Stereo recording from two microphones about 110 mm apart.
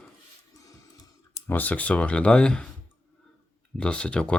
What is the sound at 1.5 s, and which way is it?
Speech, 15° left (ahead or behind).